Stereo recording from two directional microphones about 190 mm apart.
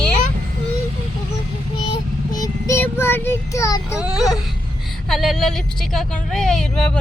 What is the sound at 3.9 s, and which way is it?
Speech, 5° right (ahead or behind).